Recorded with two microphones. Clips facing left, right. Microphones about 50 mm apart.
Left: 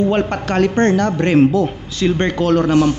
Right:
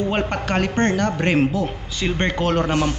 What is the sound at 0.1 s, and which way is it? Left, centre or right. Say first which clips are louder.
A man's voice: left 4 dB; centre.